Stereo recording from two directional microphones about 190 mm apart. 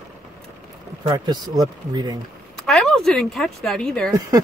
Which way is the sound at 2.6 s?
Centre (ahead or behind).